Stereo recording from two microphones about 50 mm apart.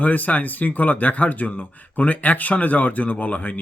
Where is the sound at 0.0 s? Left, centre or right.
Left.